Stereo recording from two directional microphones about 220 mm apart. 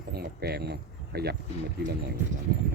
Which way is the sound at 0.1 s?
45° right (ahead or behind).